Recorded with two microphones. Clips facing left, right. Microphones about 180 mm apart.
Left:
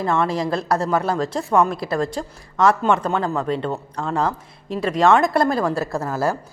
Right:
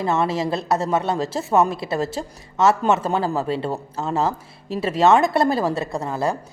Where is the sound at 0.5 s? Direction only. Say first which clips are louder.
Left 1 dB; centre (ahead or behind).